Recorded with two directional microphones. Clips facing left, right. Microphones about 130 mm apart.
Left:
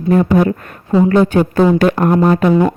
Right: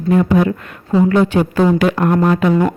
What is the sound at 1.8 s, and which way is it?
Speech, 40° left (ahead or behind).